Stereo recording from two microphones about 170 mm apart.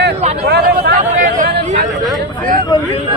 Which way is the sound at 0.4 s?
75° right (ahead or behind).